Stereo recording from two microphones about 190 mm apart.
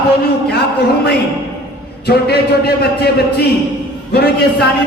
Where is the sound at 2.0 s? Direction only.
55° left (ahead or behind).